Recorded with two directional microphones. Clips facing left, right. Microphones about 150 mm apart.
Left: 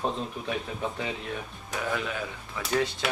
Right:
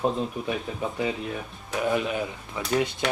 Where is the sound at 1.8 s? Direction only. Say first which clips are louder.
Right 6 dB; 20° right (ahead or behind).